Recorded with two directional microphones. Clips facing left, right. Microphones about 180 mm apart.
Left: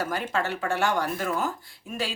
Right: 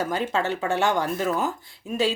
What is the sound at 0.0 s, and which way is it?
Speech, 20° right (ahead or behind).